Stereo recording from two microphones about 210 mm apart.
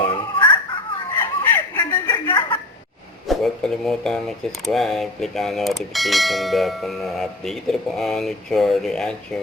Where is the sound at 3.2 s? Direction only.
Centre (ahead or behind).